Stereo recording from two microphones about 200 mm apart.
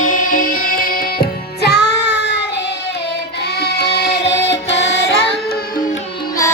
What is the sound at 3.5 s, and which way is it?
Music, 55° left (ahead or behind).